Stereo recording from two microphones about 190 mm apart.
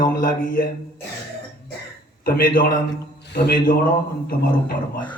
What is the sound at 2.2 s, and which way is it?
Speech, 50° left (ahead or behind).